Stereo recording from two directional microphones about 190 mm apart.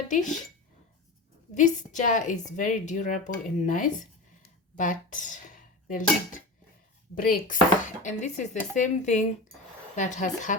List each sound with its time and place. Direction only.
0.1 s speech: 40° left (ahead or behind)
1.5 s speech: 40° left (ahead or behind)